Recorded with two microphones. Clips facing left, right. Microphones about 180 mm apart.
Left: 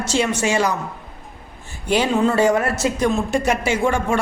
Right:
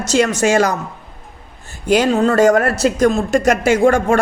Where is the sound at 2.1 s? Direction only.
45° right (ahead or behind).